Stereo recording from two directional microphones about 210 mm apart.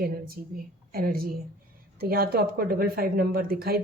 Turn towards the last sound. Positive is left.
turn(degrees=-45)  # may be behind; listen again after turning